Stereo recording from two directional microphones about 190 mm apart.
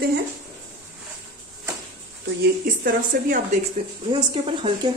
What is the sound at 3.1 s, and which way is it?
Speech, 45° right (ahead or behind).